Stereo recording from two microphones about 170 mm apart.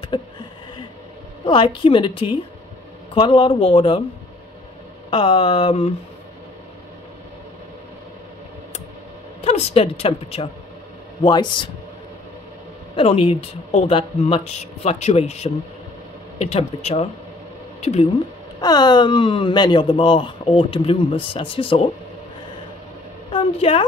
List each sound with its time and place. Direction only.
0.1 s speech: 30° left (ahead or behind)
1.4 s speech: 25° left (ahead or behind)
5.1 s speech: 30° left (ahead or behind)
9.4 s a woman's voice: 40° left (ahead or behind)
12.9 s speech: 35° left (ahead or behind)
18.6 s speech: 25° left (ahead or behind)
23.3 s a woman's voice: 30° left (ahead or behind)